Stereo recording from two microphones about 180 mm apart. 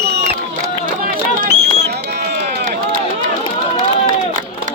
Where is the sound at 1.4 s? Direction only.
35° right (ahead or behind).